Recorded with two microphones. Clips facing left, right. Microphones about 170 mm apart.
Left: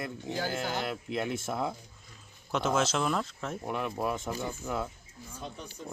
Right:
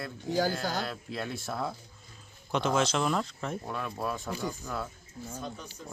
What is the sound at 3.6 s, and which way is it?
Speech, 20° left (ahead or behind).